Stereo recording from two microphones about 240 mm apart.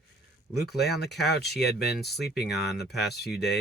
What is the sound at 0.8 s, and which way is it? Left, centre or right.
Speech, left.